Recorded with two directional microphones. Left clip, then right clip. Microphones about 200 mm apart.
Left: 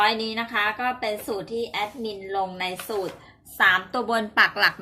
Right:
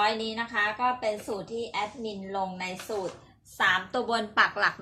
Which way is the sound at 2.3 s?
30° left (ahead or behind).